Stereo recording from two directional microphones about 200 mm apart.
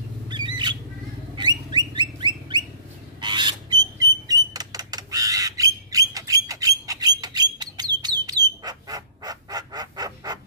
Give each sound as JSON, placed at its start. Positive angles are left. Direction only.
{"t": 1.3, "sound": "a sound", "side_deg": -20}
{"t": 2.0, "sound": "bird", "side_deg": -20}
{"t": 3.2, "sound": "rodents", "side_deg": -20}
{"t": 8.0, "sound": "bird", "side_deg": -20}